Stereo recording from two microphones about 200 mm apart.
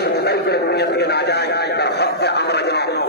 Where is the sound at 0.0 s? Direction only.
55° left (ahead or behind).